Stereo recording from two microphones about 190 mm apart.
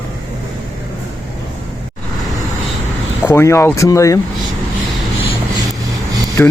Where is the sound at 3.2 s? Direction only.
20° left (ahead or behind).